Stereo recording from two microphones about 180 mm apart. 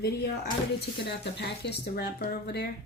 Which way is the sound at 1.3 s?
70° left (ahead or behind).